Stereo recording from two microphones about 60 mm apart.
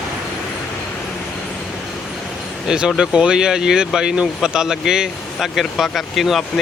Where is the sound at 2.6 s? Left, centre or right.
Centre.